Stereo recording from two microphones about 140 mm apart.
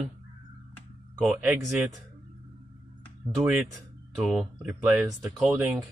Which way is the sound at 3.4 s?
10° right (ahead or behind).